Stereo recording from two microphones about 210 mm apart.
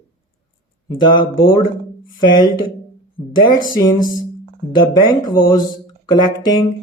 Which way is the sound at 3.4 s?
20° left (ahead or behind).